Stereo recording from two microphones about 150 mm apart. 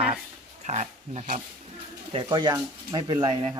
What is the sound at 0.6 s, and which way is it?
Speech, 50° right (ahead or behind).